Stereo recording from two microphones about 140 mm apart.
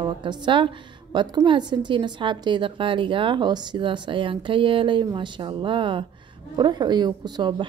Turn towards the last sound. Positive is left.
turn(degrees=-30)  # may be behind; listen again after turning